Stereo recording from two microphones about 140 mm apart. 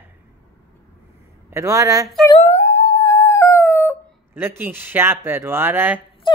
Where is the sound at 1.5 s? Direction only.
20° right (ahead or behind).